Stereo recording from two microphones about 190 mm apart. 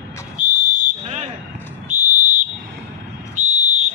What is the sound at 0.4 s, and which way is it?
Whistle, 45° right (ahead or behind).